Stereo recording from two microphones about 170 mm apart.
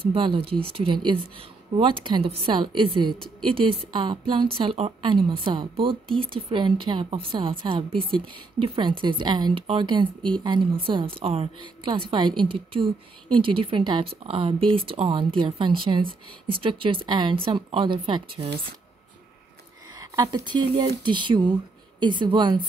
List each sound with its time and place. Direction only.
0.0 s a woman's voice: 30° right (ahead or behind)
20.0 s a woman's voice: 20° right (ahead or behind)